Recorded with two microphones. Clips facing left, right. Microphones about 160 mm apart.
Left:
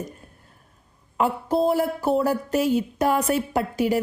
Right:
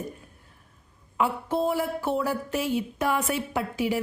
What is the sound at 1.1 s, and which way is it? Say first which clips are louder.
Speech: left 4 dB; 40° left (ahead or behind).